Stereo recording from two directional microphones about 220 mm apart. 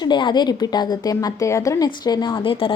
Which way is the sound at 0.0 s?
20° left (ahead or behind).